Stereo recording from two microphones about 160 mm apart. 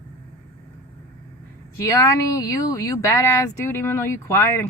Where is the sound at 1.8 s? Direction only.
20° left (ahead or behind).